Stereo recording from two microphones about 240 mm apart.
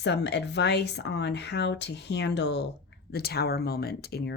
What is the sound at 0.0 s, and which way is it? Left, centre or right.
Speech, left.